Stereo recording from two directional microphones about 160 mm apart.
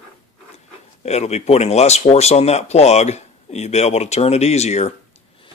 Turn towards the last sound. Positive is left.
turn(degrees=45)  # may be behind; listen again after turning